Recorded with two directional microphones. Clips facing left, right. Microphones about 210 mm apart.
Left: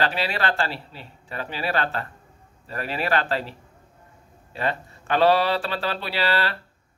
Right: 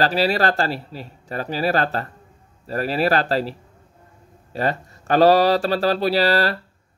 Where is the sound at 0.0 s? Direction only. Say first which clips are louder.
Right 6 dB; 40° right (ahead or behind).